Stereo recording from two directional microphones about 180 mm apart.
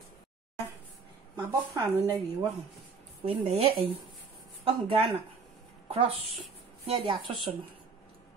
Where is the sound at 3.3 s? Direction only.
35° right (ahead or behind).